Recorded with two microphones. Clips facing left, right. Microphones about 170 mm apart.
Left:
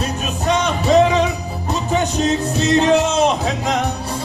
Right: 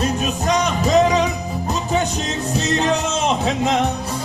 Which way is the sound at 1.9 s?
35° left (ahead or behind).